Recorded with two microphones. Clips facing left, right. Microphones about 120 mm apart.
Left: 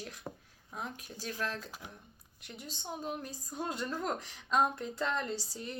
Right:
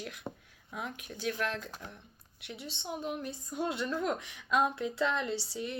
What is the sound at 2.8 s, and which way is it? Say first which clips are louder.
Female singing: right 3 dB; 40° left (ahead or behind).